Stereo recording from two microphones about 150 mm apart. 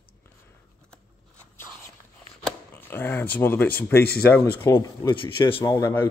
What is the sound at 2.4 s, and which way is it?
Speech, 15° left (ahead or behind).